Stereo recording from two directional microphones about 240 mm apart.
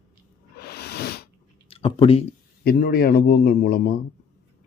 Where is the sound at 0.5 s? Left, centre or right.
Left.